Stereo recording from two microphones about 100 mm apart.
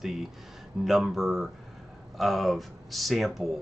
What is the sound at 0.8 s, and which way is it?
Speech, 5° right (ahead or behind).